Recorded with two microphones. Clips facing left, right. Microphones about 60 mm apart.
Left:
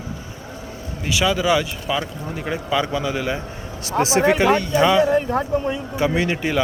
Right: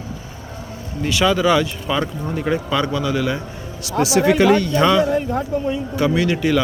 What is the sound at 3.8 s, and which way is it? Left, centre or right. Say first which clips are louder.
Speech: right 1 dB; left.